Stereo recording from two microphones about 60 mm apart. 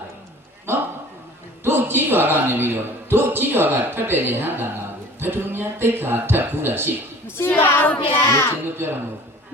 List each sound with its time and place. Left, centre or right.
1.6 s a man's voice: right
7.3 s speech: left
8.8 s a man's voice: right